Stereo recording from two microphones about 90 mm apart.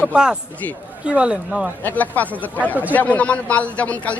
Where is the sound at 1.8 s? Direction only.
20° left (ahead or behind).